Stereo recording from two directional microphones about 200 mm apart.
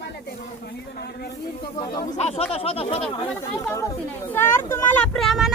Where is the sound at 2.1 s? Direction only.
30° left (ahead or behind).